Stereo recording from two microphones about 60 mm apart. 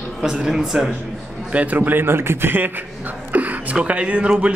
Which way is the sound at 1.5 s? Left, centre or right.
Right.